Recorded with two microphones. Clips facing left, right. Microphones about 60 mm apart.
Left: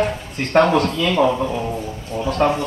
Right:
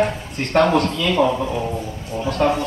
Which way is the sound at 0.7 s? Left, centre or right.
Left.